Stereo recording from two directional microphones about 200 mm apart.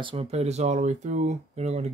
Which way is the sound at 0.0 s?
30° right (ahead or behind).